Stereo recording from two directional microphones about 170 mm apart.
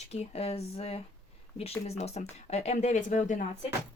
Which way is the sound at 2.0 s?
40° left (ahead or behind).